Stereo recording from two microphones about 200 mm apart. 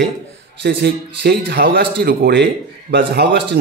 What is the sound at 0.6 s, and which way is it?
A man's voice, 55° right (ahead or behind).